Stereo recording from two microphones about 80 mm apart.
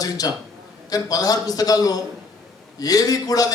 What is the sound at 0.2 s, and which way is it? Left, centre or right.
A man's voice, left.